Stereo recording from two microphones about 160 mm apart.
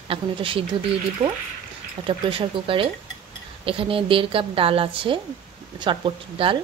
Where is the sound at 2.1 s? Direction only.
35° right (ahead or behind).